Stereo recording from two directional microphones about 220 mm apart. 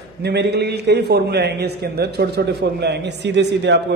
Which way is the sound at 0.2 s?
50° right (ahead or behind).